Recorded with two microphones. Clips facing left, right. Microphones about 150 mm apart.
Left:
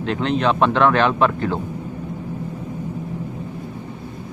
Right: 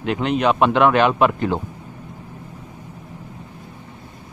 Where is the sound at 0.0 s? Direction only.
10° right (ahead or behind).